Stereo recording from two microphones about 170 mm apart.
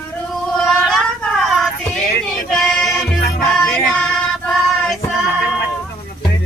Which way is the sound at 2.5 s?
Centre (ahead or behind).